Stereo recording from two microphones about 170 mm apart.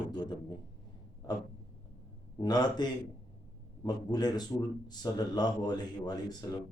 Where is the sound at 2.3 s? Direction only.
25° left (ahead or behind).